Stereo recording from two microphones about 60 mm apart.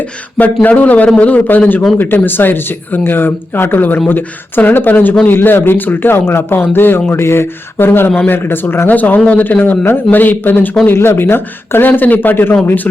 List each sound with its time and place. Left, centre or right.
0.3 s a man's voice: left
9.0 s a man's voice: left